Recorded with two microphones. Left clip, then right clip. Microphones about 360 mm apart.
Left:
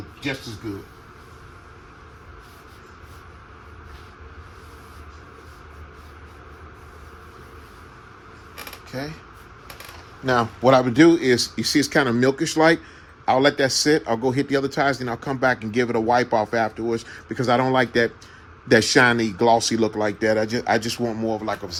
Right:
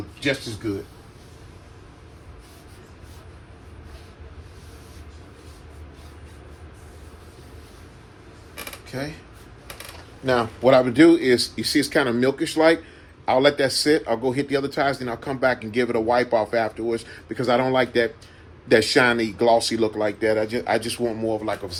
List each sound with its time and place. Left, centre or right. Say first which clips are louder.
8.9 s speech: even; left
10.2 s speech: even; left